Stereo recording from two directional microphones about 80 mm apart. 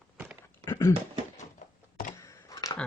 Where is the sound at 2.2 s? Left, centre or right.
Left.